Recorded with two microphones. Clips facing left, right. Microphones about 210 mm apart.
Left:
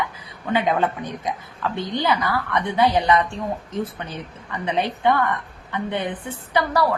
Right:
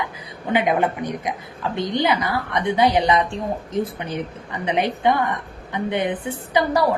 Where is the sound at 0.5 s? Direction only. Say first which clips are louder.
Right 1 dB; 15° right (ahead or behind).